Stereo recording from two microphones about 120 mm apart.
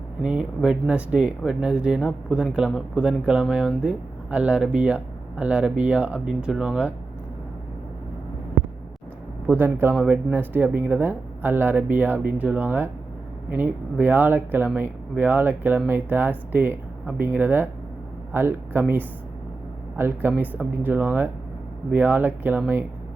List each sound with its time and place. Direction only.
0.2 s speech: 10° right (ahead or behind)
9.5 s speech: 15° right (ahead or behind)